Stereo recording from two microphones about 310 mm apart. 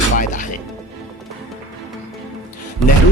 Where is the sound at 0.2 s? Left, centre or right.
Left.